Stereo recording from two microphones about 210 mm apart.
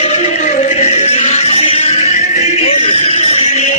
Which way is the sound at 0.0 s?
30° left (ahead or behind).